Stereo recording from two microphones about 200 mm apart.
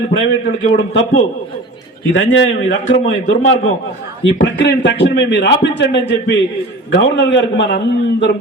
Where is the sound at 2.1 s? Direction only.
70° left (ahead or behind).